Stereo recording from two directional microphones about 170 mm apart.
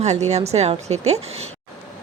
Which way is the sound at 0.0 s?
40° right (ahead or behind).